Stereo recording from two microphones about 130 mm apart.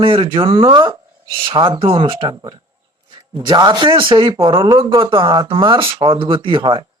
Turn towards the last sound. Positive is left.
turn(degrees=-40)  # may be behind; listen again after turning